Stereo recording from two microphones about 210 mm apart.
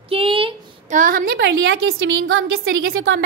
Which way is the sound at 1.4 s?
70° right (ahead or behind).